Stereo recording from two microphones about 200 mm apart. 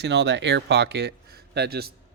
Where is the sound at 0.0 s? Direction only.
60° right (ahead or behind).